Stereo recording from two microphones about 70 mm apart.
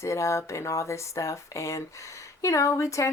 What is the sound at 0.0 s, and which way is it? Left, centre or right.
Speech, left.